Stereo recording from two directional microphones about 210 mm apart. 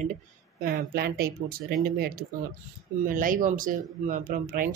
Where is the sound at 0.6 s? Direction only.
50° right (ahead or behind).